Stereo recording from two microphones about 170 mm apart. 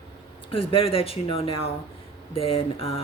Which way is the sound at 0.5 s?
35° left (ahead or behind).